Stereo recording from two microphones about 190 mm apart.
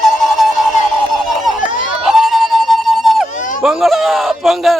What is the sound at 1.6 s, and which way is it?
Run, 45° left (ahead or behind).